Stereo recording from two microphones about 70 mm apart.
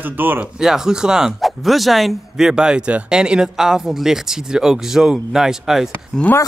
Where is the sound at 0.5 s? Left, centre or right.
Centre.